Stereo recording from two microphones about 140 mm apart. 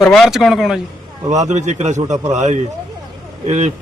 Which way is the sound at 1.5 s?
55° right (ahead or behind).